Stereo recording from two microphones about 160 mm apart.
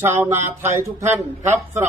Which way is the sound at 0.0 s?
15° right (ahead or behind).